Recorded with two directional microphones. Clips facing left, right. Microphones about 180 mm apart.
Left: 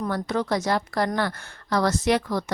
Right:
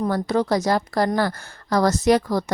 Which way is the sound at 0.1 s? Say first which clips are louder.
Right 3 dB; 40° right (ahead or behind).